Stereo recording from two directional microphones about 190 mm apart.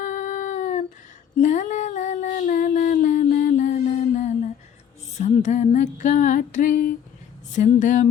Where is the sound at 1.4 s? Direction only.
40° left (ahead or behind).